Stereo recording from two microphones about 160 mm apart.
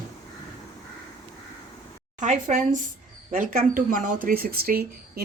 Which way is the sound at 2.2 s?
50° right (ahead or behind).